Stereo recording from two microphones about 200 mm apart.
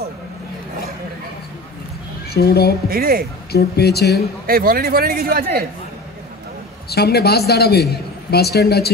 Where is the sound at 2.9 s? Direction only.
45° right (ahead or behind).